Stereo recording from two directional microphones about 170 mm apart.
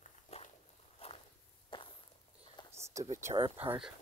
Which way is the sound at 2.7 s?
15° right (ahead or behind).